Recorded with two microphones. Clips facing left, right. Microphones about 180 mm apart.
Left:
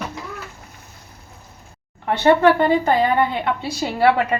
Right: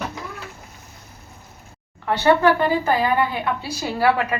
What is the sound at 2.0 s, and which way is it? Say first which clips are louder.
A woman's voice: left 2 dB; 20° left (ahead or behind).